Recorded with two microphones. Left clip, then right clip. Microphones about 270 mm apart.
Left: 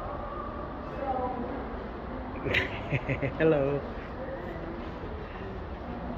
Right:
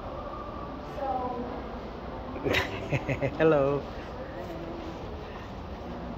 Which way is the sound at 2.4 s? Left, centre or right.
Centre.